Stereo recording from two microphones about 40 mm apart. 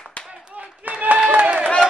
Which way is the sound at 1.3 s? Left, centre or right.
Right.